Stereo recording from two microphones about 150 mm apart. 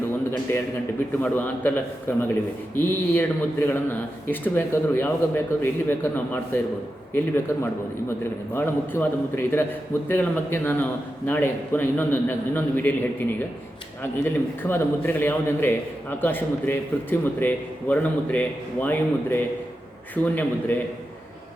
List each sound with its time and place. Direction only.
0.5 s a man's voice: 15° left (ahead or behind)